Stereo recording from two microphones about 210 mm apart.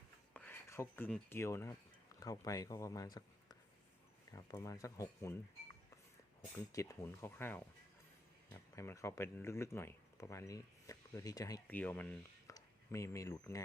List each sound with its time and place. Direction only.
0.3 s speech: 10° left (ahead or behind)
6.7 s speech: 15° left (ahead or behind)